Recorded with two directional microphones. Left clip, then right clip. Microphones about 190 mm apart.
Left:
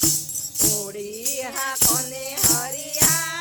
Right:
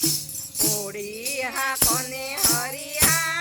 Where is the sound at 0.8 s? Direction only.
Centre (ahead or behind).